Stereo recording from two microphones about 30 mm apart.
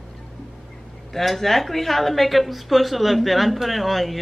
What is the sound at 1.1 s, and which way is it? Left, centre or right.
A woman's voice, centre.